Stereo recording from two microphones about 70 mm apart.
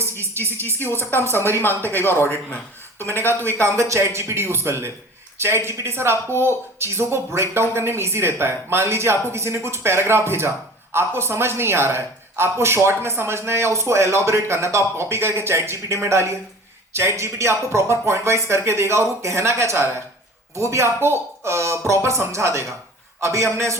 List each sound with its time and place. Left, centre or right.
0.8 s speech: left
3.6 s speech: right